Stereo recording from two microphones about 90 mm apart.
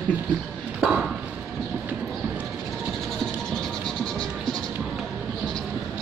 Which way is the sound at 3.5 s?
5° left (ahead or behind).